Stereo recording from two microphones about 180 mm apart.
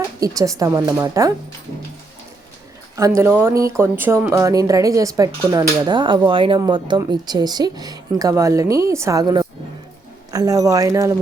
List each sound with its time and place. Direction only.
0.2 s speech: 20° right (ahead or behind)
2.9 s speech: 15° right (ahead or behind)